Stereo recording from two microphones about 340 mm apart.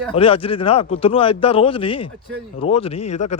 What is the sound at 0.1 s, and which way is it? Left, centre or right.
A man's voice, centre.